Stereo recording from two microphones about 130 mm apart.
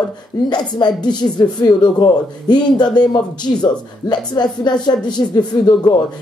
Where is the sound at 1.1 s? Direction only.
35° left (ahead or behind).